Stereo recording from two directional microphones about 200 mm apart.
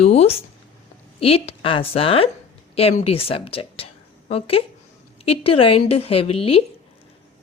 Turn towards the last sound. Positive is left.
turn(degrees=30)  # may be behind; listen again after turning